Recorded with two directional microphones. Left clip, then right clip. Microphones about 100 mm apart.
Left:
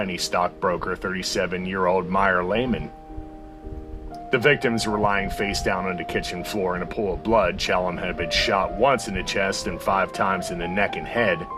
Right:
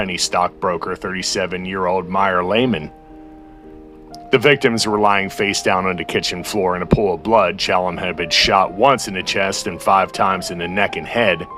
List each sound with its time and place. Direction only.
0.0 s speech: 30° right (ahead or behind)
2.4 s speech: 40° right (ahead or behind)
4.3 s speech: 40° right (ahead or behind)
7.3 s speech: 35° right (ahead or behind)